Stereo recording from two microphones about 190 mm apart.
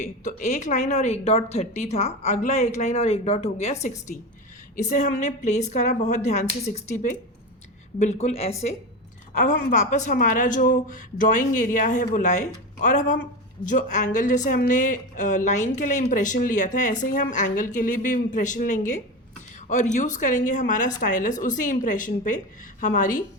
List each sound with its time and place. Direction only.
0.0 s a woman's voice: 45° left (ahead or behind)